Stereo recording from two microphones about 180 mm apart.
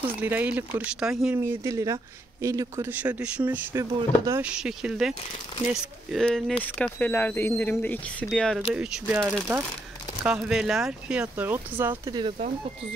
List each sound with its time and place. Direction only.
0.2 s speech: 10° right (ahead or behind)
12.1 s speech: 25° right (ahead or behind)